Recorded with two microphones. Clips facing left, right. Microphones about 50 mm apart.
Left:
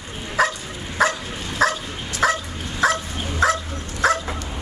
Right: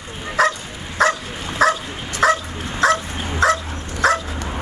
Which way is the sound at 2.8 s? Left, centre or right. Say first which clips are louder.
Right 3 dB; centre.